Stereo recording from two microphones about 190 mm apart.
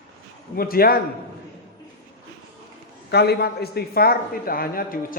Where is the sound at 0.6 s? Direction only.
50° left (ahead or behind).